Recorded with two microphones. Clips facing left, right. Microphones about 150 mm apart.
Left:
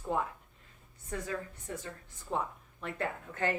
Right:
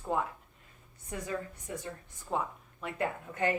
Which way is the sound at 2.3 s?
5° right (ahead or behind).